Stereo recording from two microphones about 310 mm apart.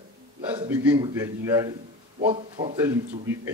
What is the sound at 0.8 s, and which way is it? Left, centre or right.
Speech, centre.